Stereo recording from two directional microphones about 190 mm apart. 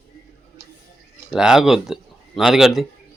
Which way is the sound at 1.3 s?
5° right (ahead or behind).